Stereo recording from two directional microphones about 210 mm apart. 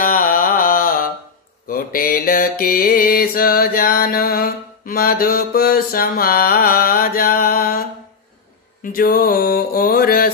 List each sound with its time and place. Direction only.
0.0 s music: 40° left (ahead or behind)
1.7 s mantra: 45° left (ahead or behind)
8.9 s mantra: 45° left (ahead or behind)